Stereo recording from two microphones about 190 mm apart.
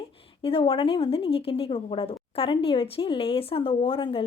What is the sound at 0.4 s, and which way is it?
Speech, 30° left (ahead or behind).